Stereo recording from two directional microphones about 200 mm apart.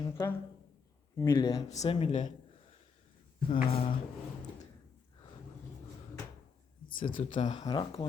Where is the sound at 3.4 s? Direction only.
30° left (ahead or behind).